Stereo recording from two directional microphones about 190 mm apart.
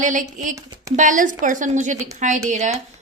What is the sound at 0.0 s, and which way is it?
A woman's voice, 40° right (ahead or behind).